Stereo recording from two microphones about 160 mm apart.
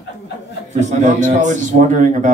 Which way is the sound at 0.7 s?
45° right (ahead or behind).